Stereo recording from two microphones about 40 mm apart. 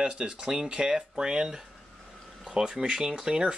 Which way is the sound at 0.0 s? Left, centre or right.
Right.